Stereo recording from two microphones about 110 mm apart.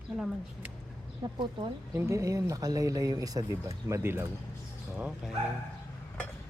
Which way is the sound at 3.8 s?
25° right (ahead or behind).